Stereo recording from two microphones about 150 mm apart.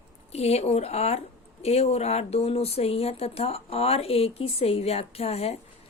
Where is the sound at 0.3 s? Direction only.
45° left (ahead or behind).